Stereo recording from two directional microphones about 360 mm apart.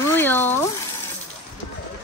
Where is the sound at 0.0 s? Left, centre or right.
Centre.